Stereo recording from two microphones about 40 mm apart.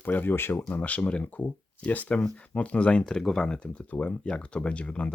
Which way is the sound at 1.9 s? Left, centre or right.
Left.